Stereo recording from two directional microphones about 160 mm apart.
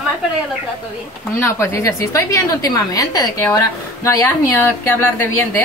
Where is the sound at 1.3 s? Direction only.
15° left (ahead or behind).